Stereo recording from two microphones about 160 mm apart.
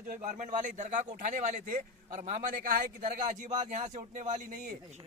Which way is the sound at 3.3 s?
50° right (ahead or behind).